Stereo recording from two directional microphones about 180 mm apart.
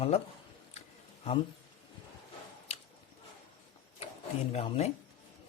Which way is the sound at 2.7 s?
35° left (ahead or behind).